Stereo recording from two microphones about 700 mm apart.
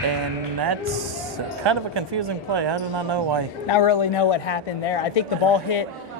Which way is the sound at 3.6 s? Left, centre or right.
Left.